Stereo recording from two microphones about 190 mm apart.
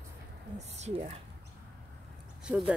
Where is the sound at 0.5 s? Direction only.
35° right (ahead or behind).